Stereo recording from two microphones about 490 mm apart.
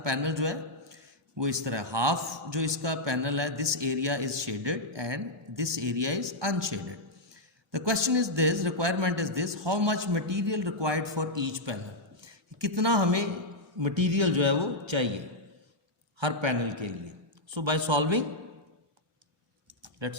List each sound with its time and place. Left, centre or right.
0.0 s a man's voice: right
16.2 s a man's voice: right
20.0 s a man's voice: right